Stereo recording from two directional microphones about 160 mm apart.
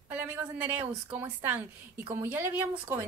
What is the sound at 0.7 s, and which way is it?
A woman's voice, 10° right (ahead or behind).